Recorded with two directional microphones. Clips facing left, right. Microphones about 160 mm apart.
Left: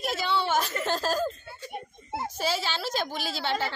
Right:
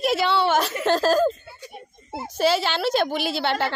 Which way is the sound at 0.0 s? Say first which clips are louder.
Right 7 dB; 75° right (ahead or behind).